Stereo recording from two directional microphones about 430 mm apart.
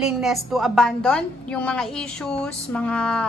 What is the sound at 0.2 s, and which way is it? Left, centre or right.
Speech, centre.